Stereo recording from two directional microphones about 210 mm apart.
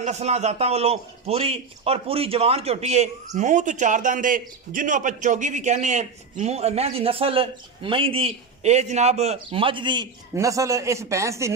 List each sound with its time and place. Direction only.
0.0 s a man's voice: 30° right (ahead or behind); by 11.5 s 15° right (ahead or behind)